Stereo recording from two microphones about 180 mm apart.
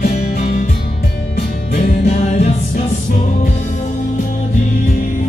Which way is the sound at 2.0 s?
40° left (ahead or behind).